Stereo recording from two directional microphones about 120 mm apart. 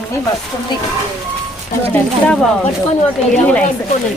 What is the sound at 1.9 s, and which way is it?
Speech, 10° left (ahead or behind).